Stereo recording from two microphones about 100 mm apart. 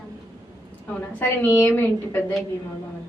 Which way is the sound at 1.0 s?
20° left (ahead or behind).